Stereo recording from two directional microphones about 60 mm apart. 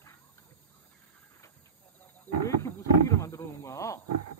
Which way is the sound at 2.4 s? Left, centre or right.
Left.